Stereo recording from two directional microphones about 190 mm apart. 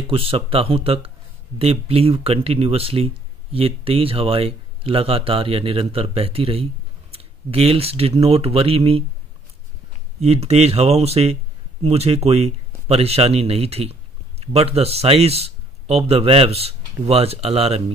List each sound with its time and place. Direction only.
0.0 s a man's voice: 30° right (ahead or behind)
10.2 s a man's voice: 30° right (ahead or behind)